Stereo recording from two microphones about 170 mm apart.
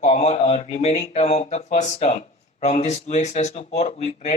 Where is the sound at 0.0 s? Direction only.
40° left (ahead or behind).